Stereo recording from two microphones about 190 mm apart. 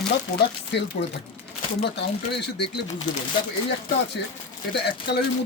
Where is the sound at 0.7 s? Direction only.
65° left (ahead or behind).